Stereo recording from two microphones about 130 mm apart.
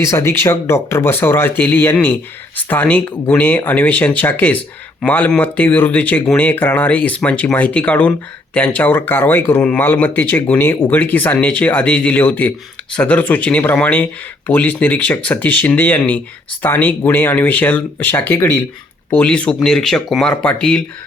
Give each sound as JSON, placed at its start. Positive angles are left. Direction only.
{"t": 0.1, "sound": "speech", "side_deg": 20}